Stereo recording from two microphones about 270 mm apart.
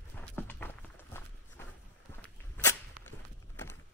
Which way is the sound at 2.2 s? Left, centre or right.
Centre.